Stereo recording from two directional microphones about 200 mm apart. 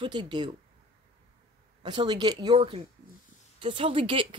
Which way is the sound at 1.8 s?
20° right (ahead or behind).